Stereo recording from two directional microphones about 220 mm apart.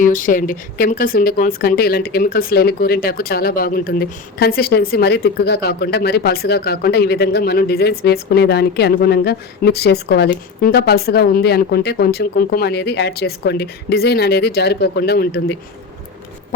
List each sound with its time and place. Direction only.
0.0 s speech: 35° left (ahead or behind)